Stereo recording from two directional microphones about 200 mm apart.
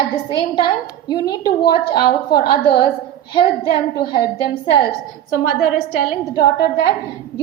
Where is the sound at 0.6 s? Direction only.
20° left (ahead or behind).